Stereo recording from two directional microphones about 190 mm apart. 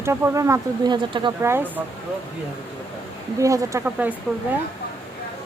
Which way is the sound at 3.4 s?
15° right (ahead or behind).